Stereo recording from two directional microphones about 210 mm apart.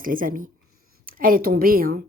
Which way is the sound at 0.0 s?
40° right (ahead or behind).